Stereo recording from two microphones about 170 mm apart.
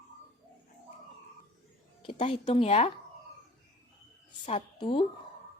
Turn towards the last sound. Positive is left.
turn(degrees=30)  # may be behind; listen again after turning